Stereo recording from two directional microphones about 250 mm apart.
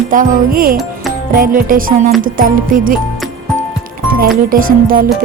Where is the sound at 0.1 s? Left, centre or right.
Right.